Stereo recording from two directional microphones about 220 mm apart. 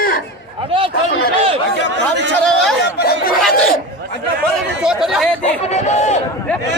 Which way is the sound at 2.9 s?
45° left (ahead or behind).